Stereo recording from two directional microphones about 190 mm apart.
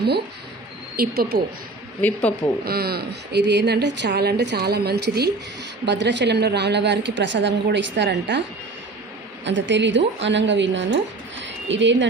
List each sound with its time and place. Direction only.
0.9 s a woman's voice: 55° right (ahead or behind)
2.0 s speech: 10° left (ahead or behind)
2.6 s a woman's voice: 55° right (ahead or behind)
9.4 s a woman's voice: 75° right (ahead or behind)